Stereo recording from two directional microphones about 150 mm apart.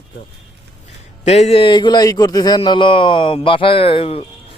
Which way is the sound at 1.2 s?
45° left (ahead or behind).